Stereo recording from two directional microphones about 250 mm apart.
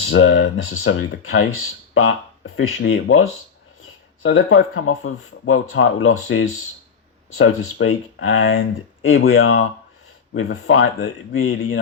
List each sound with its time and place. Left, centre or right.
0.1 s speech: left
7.3 s speech: left